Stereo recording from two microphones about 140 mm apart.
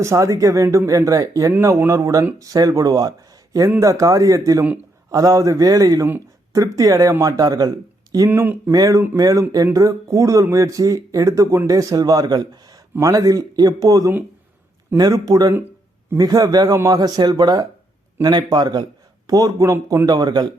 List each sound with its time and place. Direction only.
0.0 s speech: 20° right (ahead or behind)
6.1 s a sound: 20° right (ahead or behind)
6.7 s speech: 25° right (ahead or behind)
8.3 s speech: 15° right (ahead or behind)
8.7 s speech: 25° right (ahead or behind)